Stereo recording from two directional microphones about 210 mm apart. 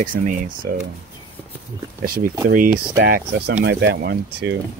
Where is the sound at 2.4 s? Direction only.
40° right (ahead or behind).